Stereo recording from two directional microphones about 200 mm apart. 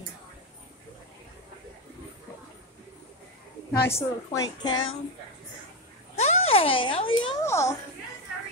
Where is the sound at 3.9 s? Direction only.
15° left (ahead or behind).